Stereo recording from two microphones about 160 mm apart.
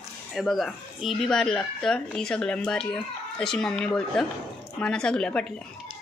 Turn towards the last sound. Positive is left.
turn(degrees=5)  # may be behind; listen again after turning